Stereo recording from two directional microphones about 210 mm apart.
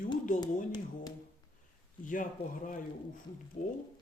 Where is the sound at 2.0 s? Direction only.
40° left (ahead or behind).